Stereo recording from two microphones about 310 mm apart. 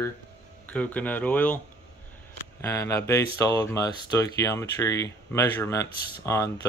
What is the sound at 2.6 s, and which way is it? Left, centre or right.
Speech, centre.